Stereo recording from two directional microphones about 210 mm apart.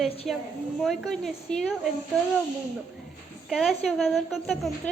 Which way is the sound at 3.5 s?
Centre (ahead or behind).